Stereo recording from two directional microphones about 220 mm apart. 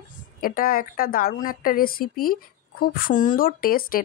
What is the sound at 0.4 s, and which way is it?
Speech, 40° left (ahead or behind).